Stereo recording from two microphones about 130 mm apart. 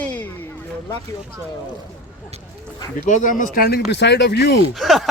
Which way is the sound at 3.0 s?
80° left.